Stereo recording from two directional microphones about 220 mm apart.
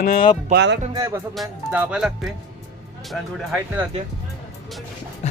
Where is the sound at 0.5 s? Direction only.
55° right (ahead or behind).